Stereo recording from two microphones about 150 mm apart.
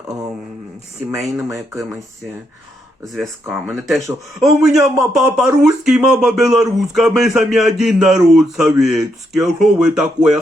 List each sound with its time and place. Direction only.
1.1 s a man's voice: 5° right (ahead or behind)
1.5 s speech: 20° right (ahead or behind)
3.0 s a man's voice: centre (ahead or behind)